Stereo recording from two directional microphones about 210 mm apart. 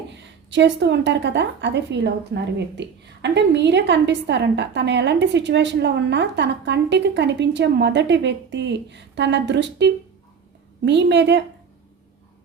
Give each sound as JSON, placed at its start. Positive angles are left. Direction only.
{"t": 0.1, "sound": "a woman's voice", "side_deg": -55}